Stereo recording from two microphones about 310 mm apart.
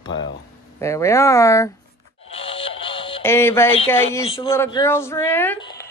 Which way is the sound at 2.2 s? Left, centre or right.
Centre.